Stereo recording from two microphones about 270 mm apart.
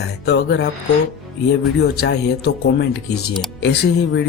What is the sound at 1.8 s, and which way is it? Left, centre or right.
Speech, left.